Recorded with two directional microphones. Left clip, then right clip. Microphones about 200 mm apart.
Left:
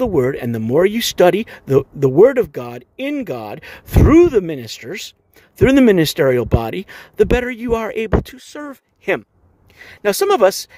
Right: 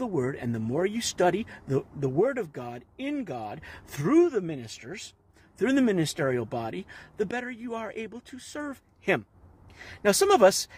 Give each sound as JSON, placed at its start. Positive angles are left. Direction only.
{"t": 0.0, "sound": "speech", "side_deg": 55}